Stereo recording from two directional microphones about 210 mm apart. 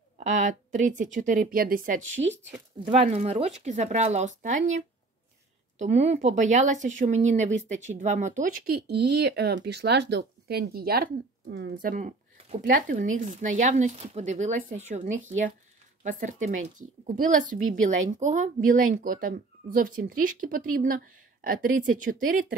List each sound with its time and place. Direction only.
0.2 s speech: 35° right (ahead or behind)
2.8 s speech: 30° right (ahead or behind); by 11.7 s 50° right (ahead or behind)
11.8 s speech: 40° right (ahead or behind)